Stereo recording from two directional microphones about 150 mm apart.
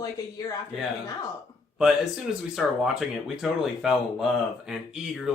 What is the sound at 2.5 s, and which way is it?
Speech, centre (ahead or behind).